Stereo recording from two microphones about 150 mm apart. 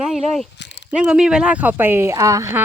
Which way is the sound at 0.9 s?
5° right (ahead or behind).